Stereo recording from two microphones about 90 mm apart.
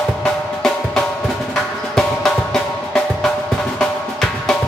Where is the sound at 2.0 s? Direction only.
5° left (ahead or behind).